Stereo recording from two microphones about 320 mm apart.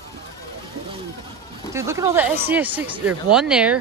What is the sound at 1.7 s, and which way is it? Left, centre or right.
Speech, centre.